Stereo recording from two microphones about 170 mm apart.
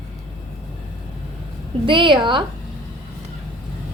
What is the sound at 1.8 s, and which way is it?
Speech, 30° right (ahead or behind).